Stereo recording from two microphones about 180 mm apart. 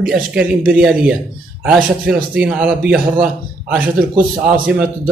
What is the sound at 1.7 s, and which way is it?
Speech, 5° right (ahead or behind).